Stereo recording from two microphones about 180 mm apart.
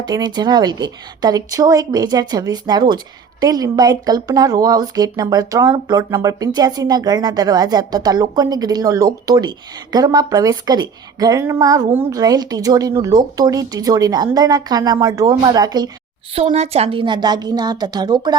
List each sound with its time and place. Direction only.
0.0 s speech: 25° right (ahead or behind)